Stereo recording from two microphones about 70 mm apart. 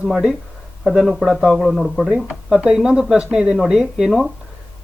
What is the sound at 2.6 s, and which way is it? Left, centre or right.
Speech, centre.